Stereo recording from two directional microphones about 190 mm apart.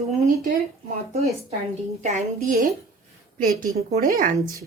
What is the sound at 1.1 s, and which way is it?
A woman's voice, 35° right (ahead or behind).